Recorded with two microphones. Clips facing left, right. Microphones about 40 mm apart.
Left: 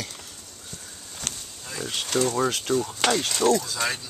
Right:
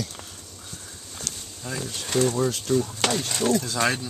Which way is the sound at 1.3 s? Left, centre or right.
Left.